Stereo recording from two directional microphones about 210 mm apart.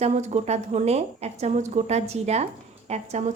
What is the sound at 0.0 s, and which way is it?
A woman's voice, 30° right (ahead or behind).